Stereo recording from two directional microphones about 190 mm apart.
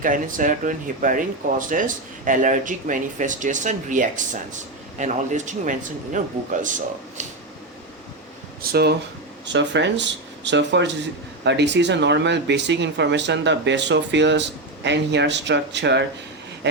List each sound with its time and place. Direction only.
0.0 s speech: 45° right (ahead or behind)
8.6 s speech: 55° right (ahead or behind)
9.5 s speech: 70° right (ahead or behind)